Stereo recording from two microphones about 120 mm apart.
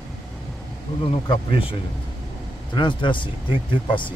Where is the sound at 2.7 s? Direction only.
40° left (ahead or behind).